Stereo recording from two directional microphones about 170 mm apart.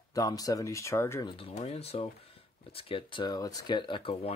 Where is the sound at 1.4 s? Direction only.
35° left (ahead or behind).